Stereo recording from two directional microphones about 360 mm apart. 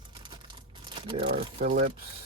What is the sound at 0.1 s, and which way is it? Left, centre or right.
Crumpling, centre.